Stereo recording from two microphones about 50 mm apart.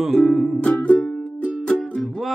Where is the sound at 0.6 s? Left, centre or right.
Left.